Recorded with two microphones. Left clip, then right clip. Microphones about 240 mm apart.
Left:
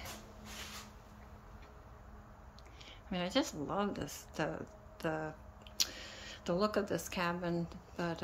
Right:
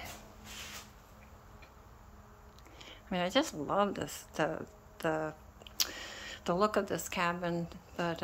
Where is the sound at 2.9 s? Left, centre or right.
Centre.